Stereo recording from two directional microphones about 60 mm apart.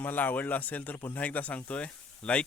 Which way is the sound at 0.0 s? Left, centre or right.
Left.